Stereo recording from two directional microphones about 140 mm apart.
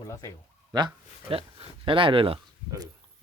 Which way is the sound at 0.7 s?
35° right (ahead or behind).